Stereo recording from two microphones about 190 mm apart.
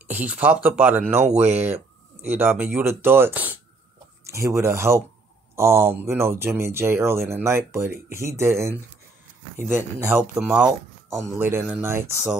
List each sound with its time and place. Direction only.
0.1 s speech: 10° right (ahead or behind)
1.2 s speech: 35° right (ahead or behind)
2.2 s speech: 10° right (ahead or behind)